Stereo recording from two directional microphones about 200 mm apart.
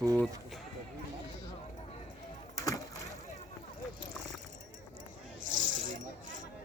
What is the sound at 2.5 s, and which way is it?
Chop, 15° left (ahead or behind).